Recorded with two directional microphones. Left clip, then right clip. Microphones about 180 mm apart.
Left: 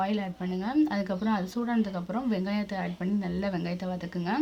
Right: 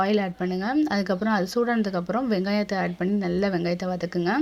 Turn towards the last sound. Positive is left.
turn(degrees=-30)  # may be behind; listen again after turning